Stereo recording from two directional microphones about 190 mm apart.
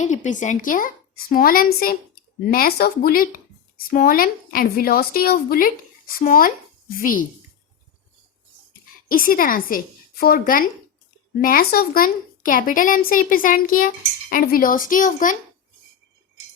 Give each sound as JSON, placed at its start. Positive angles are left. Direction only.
{"t": 0.0, "sound": "a woman's voice", "side_deg": 40}
{"t": 9.0, "sound": "a woman's voice", "side_deg": 45}